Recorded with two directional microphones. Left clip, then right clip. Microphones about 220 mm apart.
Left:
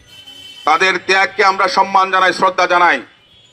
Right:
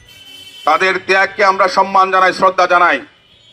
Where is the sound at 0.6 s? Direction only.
50° left (ahead or behind).